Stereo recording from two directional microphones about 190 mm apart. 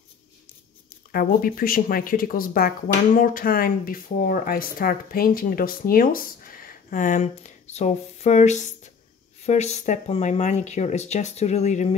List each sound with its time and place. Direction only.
1.1 s speech: 50° left (ahead or behind)